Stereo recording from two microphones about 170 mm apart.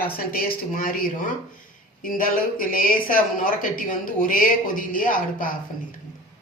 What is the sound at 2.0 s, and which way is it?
Speech, 55° left (ahead or behind).